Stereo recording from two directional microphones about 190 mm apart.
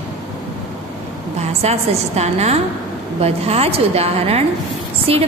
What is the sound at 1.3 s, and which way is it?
A woman's voice, 35° right (ahead or behind).